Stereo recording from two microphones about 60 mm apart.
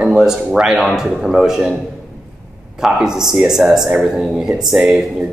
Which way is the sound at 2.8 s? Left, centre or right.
Centre.